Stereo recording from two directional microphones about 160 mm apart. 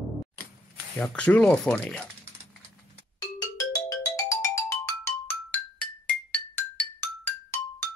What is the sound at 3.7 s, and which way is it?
Music, 20° left (ahead or behind).